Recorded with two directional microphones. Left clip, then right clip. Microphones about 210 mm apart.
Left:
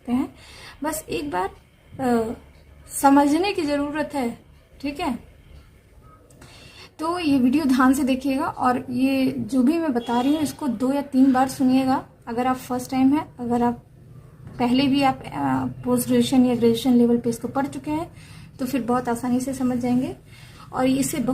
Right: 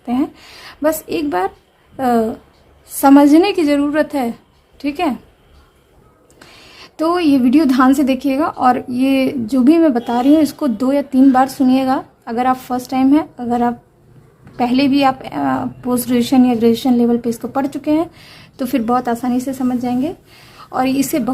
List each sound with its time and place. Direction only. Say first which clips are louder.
0.0 s a woman's voice: right 7 dB; 45° right (ahead or behind)
6.7 s a woman's voice: right 10 dB; 40° right (ahead or behind)